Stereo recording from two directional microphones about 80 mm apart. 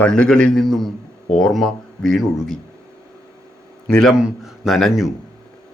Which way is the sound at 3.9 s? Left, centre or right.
Centre.